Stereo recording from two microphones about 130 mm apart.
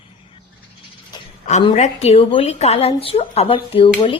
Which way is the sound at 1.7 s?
60° left (ahead or behind).